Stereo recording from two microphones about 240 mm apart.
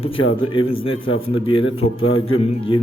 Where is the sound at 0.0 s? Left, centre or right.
Left.